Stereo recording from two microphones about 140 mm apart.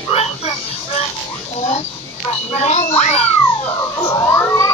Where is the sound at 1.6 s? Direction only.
50° left (ahead or behind).